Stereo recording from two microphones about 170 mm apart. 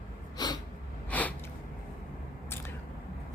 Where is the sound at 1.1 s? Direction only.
10° left (ahead or behind).